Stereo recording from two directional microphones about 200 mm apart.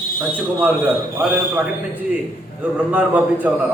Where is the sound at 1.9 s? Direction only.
10° right (ahead or behind).